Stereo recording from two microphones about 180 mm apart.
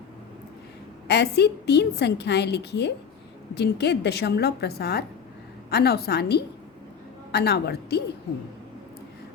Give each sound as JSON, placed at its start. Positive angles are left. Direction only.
{"t": 1.0, "sound": "a woman's voice", "side_deg": 65}